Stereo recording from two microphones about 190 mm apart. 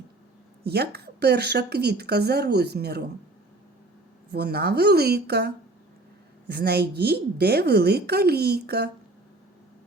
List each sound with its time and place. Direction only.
0.6 s speech: 55° right (ahead or behind)
4.3 s speech: 55° right (ahead or behind)